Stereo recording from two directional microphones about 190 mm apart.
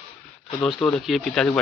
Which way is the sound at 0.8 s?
Centre (ahead or behind).